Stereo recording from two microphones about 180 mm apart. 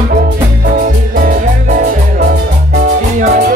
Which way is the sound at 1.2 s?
50° right (ahead or behind).